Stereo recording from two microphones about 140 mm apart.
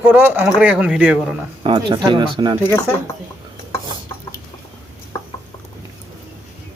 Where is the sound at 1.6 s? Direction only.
35° right (ahead or behind).